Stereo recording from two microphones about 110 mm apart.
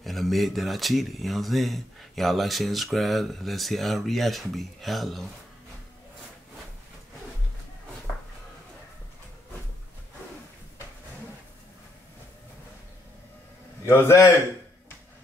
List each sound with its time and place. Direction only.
0.0 s speech: centre (ahead or behind)
13.8 s a man's voice: 25° left (ahead or behind)